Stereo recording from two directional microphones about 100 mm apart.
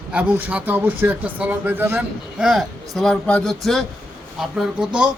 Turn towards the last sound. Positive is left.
turn(degrees=-5)  # may be behind; listen again after turning